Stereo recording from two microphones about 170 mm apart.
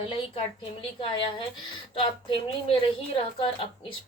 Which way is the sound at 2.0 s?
30° left (ahead or behind).